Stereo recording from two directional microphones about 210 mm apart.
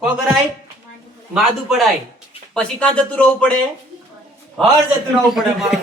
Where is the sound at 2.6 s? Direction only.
5° left (ahead or behind).